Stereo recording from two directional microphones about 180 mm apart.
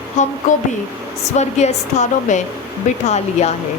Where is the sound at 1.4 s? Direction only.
40° left (ahead or behind).